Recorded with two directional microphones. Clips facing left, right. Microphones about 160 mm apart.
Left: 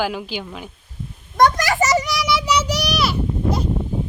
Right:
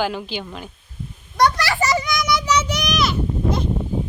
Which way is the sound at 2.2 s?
10° left (ahead or behind).